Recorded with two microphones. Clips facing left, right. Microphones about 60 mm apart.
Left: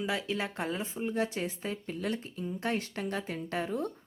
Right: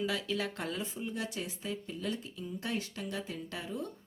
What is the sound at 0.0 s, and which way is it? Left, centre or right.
Speech, left.